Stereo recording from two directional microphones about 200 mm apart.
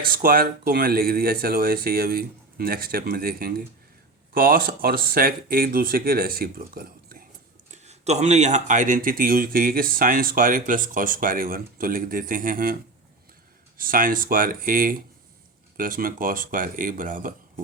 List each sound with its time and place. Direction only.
0.0 s speech: 45° right (ahead or behind)
7.7 s speech: 35° right (ahead or behind)
13.7 s speech: 45° right (ahead or behind)